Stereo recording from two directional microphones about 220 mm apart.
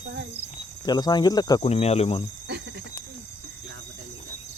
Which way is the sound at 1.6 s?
30° left (ahead or behind).